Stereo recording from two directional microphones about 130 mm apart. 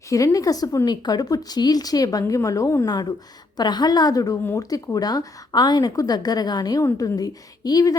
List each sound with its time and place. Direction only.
0.1 s a woman's voice: 25° left (ahead or behind)